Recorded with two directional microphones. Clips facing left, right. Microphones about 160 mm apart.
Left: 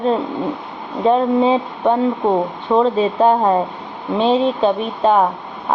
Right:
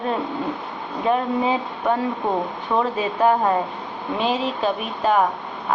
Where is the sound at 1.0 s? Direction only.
30° left (ahead or behind).